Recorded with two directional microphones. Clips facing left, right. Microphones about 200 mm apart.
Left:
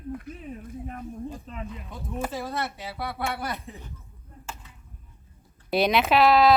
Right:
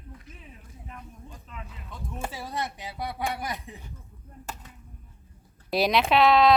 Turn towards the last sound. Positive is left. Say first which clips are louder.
# left 1 dB
turn(degrees=5)  # may be behind; listen again after turning